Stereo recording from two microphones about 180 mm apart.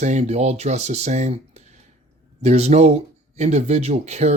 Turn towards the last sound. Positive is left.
turn(degrees=-40)  # may be behind; listen again after turning